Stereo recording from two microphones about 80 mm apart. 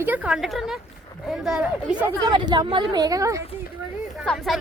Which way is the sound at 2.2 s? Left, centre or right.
Right.